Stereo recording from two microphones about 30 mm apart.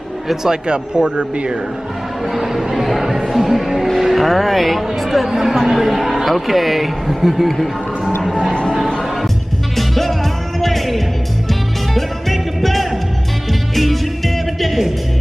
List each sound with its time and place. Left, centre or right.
0.7 s a man's voice: right
2.3 s speech: centre
7.5 s music: centre
9.8 s music: centre